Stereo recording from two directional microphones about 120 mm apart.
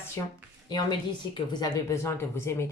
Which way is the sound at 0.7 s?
35° left (ahead or behind).